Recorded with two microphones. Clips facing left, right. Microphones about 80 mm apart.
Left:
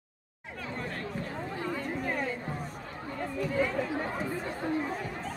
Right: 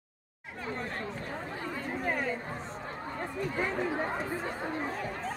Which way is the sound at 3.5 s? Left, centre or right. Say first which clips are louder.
Left 2 dB; right.